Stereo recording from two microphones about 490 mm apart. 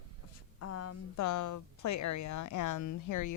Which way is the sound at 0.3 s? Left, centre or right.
Left.